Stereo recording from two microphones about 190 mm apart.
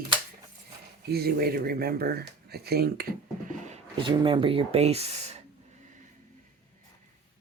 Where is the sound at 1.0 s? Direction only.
55° right (ahead or behind).